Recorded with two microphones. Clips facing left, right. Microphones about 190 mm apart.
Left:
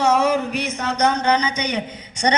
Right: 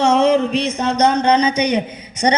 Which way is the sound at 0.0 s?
25° right (ahead or behind).